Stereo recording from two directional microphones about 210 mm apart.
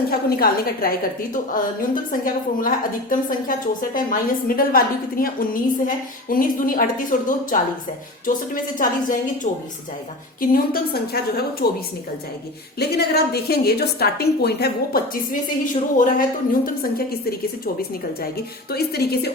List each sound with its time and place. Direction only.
0.1 s a woman's voice: 45° left (ahead or behind)
10.5 s a woman's voice: 45° left (ahead or behind)
12.8 s a woman's voice: 50° left (ahead or behind)